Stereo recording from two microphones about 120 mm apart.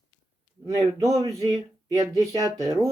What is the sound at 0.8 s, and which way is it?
Speech, 30° right (ahead or behind).